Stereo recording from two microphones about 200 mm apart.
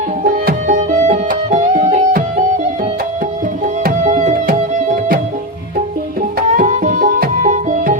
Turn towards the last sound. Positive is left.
turn(degrees=-40)  # may be behind; listen again after turning